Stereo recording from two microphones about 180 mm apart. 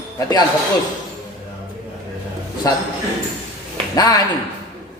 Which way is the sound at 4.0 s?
20° left (ahead or behind).